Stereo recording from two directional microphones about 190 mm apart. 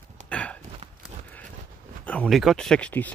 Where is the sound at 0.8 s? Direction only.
35° right (ahead or behind).